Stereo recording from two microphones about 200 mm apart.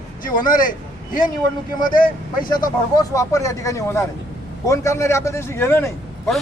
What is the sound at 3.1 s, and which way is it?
Speech, 15° left (ahead or behind).